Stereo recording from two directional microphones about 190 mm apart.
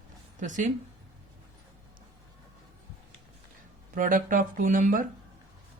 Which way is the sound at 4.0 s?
45° right (ahead or behind).